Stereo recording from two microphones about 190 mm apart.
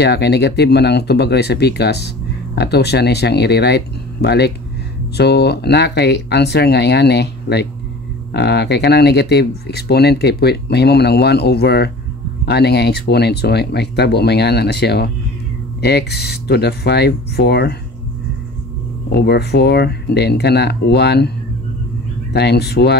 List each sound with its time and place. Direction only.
0.0 s speech: 60° left (ahead or behind)
19.1 s speech: 60° left (ahead or behind)
22.3 s speech: 60° left (ahead or behind)